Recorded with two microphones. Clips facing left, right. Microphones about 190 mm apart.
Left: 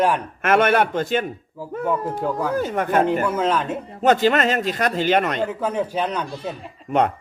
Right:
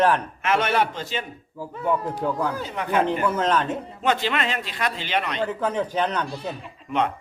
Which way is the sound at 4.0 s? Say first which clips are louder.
Left 8 dB; 45° left (ahead or behind).